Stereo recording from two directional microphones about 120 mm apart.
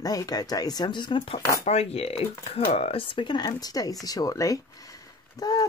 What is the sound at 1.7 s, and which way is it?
Speech, 60° left (ahead or behind).